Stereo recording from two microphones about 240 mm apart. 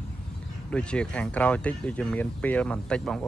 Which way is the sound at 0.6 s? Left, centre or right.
Centre.